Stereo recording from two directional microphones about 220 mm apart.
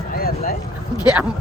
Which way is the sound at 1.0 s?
5° right (ahead or behind).